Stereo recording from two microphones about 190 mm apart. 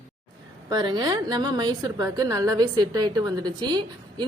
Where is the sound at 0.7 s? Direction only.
20° right (ahead or behind).